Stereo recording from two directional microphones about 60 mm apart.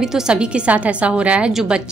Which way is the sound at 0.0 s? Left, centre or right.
Centre.